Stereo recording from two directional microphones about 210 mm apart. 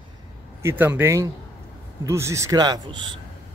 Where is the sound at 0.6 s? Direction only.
10° right (ahead or behind).